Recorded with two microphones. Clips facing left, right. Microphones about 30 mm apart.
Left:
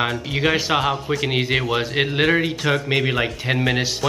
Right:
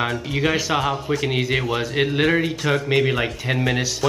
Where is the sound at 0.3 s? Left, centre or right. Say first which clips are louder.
Left 2 dB; centre.